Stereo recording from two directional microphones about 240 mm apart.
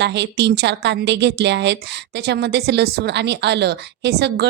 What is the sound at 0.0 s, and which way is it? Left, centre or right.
Speech, right.